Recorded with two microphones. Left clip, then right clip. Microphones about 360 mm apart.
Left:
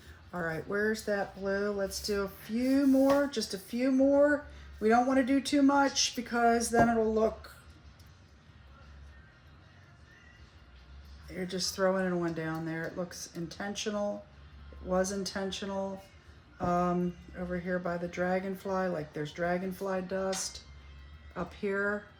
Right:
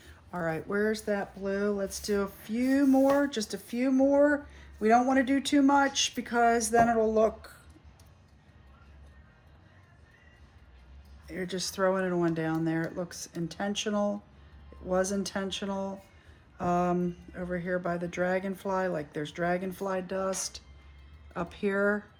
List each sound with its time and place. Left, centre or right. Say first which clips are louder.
0.3 s speech: right 2 dB; right
1.0 s speech: even; right
1.9 s speech: right 2 dB; right
11.3 s speech: right 1 dB; right